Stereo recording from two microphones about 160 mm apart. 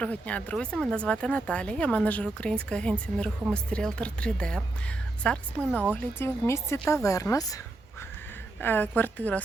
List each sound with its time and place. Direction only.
0.0 s a woman's voice: 10° left (ahead or behind)
8.6 s speech: 10° left (ahead or behind)